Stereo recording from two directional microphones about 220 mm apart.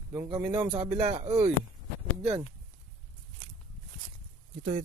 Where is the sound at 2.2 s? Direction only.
15° right (ahead or behind).